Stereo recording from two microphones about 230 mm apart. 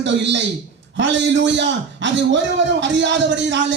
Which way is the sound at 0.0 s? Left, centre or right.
Right.